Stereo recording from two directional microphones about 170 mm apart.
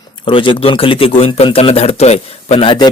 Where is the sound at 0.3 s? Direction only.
30° left (ahead or behind).